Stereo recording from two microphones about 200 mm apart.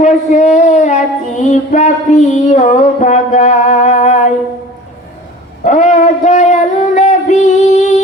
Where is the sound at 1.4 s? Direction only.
35° left (ahead or behind).